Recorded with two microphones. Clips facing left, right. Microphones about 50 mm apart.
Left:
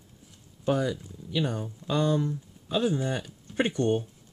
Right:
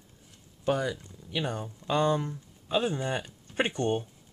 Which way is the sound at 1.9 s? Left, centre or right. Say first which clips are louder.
Even; right.